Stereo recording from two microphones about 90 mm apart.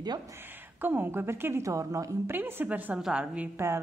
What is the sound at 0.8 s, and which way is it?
A woman's voice, 20° right (ahead or behind).